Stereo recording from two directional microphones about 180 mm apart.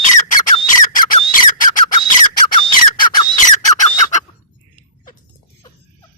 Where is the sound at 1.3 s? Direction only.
50° left (ahead or behind).